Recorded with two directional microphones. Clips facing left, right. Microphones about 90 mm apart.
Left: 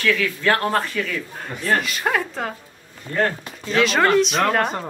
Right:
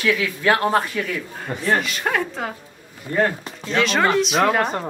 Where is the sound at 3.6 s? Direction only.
Centre (ahead or behind).